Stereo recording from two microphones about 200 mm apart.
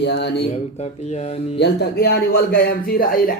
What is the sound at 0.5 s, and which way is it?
Speech, 35° left (ahead or behind).